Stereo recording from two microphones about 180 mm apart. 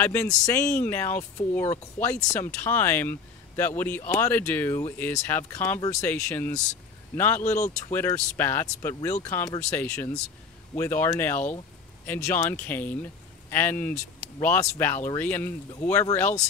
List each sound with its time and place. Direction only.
0.0 s speech: 10° left (ahead or behind)
7.4 s speech: 40° left (ahead or behind)
7.9 s speech: 15° left (ahead or behind)